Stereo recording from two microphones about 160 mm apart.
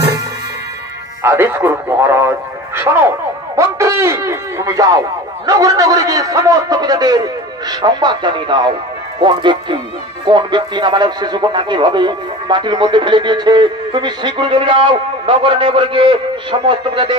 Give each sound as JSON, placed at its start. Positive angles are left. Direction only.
{"t": 1.2, "sound": "a man's voice", "side_deg": -15}